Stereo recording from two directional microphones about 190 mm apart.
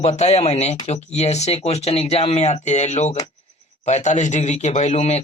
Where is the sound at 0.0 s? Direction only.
35° left (ahead or behind).